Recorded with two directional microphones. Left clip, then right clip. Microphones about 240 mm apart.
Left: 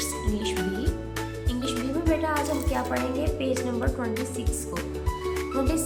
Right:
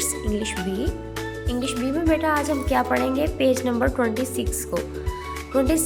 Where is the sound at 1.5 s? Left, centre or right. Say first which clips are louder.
Right 4 dB; centre.